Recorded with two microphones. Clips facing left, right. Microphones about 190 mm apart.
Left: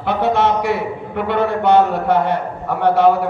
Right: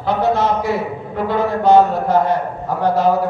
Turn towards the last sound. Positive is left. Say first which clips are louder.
# left 2 dB
turn(degrees=65)  # may be behind; listen again after turning